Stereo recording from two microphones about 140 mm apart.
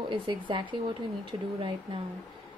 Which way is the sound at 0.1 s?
35° right (ahead or behind).